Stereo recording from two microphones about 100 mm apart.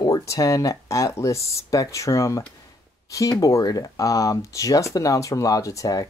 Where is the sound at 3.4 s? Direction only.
35° left (ahead or behind).